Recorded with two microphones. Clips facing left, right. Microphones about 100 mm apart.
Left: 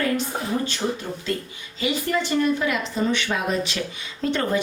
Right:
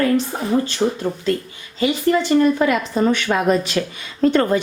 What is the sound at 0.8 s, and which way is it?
Speech, 35° right (ahead or behind).